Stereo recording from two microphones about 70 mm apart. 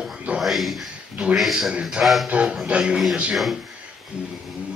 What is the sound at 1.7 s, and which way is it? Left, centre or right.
A man's voice, centre.